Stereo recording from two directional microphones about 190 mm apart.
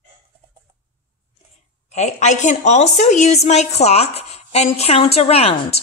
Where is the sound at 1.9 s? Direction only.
35° left (ahead or behind).